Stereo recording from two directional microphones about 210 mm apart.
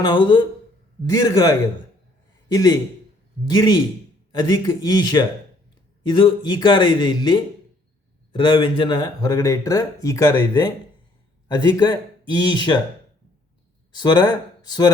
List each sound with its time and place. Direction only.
0.0 s a man's voice: 20° left (ahead or behind)
13.9 s speech: 20° left (ahead or behind)